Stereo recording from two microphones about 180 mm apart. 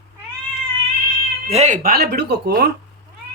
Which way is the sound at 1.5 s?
40° right (ahead or behind).